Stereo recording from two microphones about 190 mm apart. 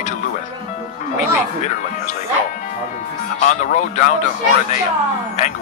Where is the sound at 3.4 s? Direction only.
40° left (ahead or behind).